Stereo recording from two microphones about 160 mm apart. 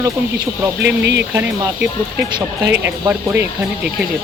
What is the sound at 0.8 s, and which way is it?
Speech, 90° right.